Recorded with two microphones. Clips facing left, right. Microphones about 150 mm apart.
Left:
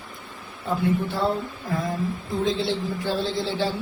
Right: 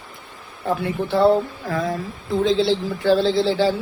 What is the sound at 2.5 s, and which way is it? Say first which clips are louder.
Speech: right 6 dB; 90° right.